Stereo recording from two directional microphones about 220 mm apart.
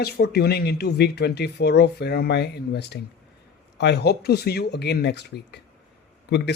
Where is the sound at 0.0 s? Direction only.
45° left (ahead or behind).